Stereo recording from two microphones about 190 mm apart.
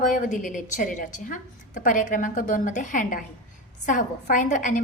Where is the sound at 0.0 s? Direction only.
45° left (ahead or behind).